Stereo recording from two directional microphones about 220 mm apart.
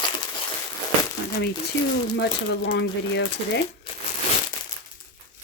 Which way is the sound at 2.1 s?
50° left (ahead or behind).